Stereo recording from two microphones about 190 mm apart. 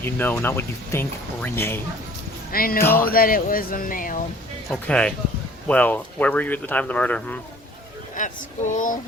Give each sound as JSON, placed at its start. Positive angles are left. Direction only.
{"t": 0.0, "sound": "speech", "side_deg": 10}
{"t": 2.5, "sound": "speech", "side_deg": 50}
{"t": 2.8, "sound": "speech", "side_deg": 10}
{"t": 3.1, "sound": "speech", "side_deg": 50}
{"t": 4.7, "sound": "speech", "side_deg": 5}
{"t": 8.1, "sound": "speech", "side_deg": 40}